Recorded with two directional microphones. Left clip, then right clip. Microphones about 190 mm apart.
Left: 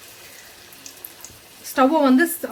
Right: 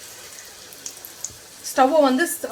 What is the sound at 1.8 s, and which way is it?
Speech, 50° left (ahead or behind).